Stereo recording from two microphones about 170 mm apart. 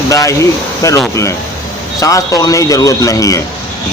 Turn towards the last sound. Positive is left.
turn(degrees=20)  # may be behind; listen again after turning